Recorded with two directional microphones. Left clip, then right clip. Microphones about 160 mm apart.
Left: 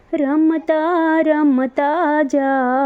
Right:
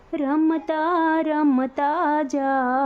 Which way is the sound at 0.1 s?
25° left (ahead or behind).